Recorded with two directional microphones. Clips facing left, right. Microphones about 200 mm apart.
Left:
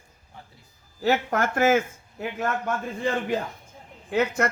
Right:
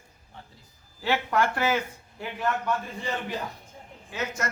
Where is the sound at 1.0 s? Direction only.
45° left (ahead or behind).